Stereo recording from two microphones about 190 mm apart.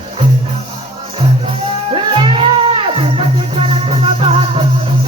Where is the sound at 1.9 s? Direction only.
25° right (ahead or behind).